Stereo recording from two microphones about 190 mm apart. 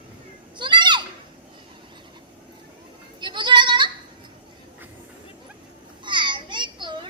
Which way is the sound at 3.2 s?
25° right (ahead or behind).